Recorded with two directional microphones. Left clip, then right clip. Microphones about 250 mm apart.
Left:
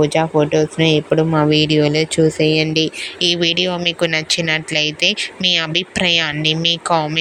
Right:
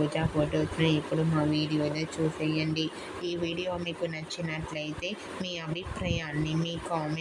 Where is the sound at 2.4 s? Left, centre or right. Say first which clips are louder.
Left 15 dB; left.